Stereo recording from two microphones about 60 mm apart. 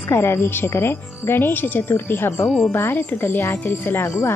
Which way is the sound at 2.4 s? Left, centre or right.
Centre.